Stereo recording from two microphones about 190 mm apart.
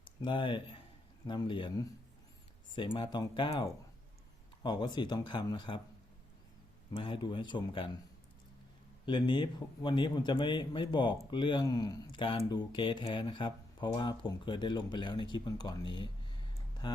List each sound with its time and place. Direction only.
0.0 s speech: 25° left (ahead or behind)
6.9 s speech: 25° left (ahead or behind)
9.0 s speech: 25° left (ahead or behind)